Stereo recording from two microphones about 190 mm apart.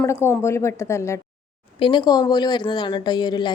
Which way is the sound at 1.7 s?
25° left (ahead or behind).